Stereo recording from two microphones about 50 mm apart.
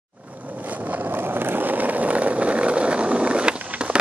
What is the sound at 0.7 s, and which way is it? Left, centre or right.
Vehicle, right.